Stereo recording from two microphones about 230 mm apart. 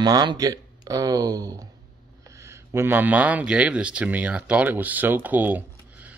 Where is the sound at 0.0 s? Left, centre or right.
Centre.